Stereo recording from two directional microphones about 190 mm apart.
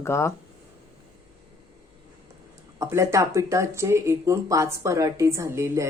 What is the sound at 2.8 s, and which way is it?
Speech, 15° right (ahead or behind).